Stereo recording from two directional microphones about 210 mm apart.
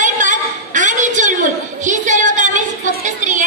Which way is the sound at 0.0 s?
35° right (ahead or behind).